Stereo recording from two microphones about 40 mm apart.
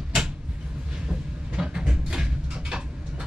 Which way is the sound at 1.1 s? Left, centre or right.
Centre.